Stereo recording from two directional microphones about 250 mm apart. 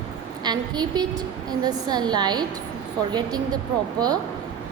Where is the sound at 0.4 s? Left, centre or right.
Centre.